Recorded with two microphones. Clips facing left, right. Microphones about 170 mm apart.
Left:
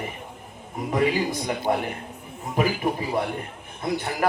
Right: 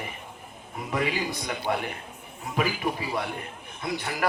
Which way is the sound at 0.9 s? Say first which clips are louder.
Left 5 dB; 45° left (ahead or behind).